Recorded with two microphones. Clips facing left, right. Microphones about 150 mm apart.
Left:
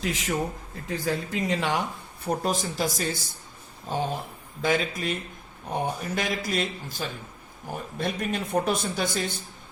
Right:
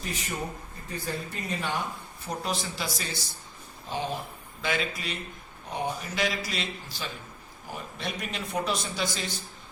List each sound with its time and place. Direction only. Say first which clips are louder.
0.0 s speech: left 6 dB; 90° left
2.2 s a man's voice: left 5 dB; 45° left (ahead or behind)